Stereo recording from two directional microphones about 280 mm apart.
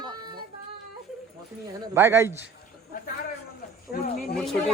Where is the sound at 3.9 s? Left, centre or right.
Left.